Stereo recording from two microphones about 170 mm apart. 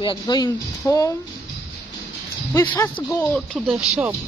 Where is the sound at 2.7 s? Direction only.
15° left (ahead or behind).